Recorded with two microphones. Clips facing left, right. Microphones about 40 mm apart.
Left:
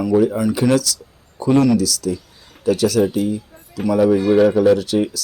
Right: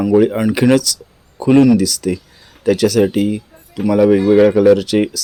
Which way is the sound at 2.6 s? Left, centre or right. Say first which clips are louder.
Right 3 dB; right.